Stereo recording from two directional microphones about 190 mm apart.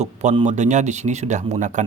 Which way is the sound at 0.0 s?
35° right (ahead or behind).